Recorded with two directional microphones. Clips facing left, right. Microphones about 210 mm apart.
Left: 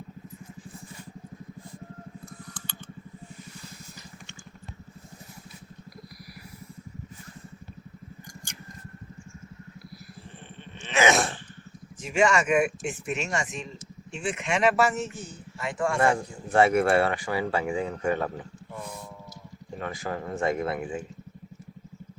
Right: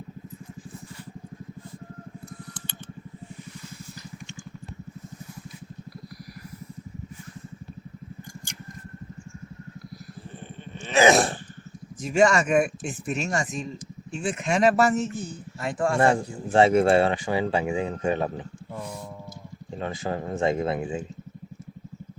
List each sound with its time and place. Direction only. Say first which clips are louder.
10.8 s sneeze: right 4 dB; 35° right (ahead or behind)
12.0 s a man's voice: right 3 dB; 40° right (ahead or behind); by 18.4 s 20° right (ahead or behind)
19.8 s a man's voice: right 3 dB; 25° right (ahead or behind)